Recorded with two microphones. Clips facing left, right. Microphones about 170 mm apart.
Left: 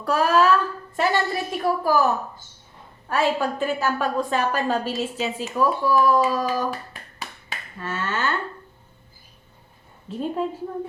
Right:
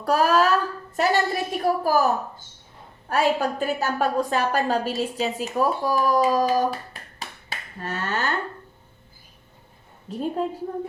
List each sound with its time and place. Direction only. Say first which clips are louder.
0.0 s a woman's voice: even; 40° right (ahead or behind)
3.1 s a woman's voice: even; 40° right (ahead or behind)
7.2 s finger snapping: even; 40° right (ahead or behind)
10.1 s a woman's voice: even; 40° right (ahead or behind)